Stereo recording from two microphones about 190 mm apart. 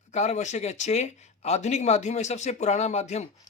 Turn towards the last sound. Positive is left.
turn(degrees=35)  # may be behind; listen again after turning